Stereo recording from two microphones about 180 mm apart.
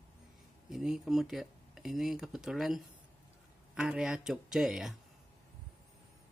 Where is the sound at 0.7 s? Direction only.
Centre (ahead or behind).